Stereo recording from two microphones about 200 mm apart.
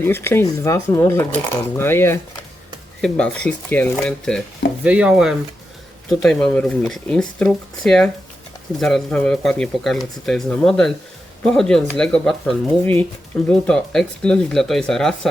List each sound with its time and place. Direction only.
0.0 s speech: 10° left (ahead or behind)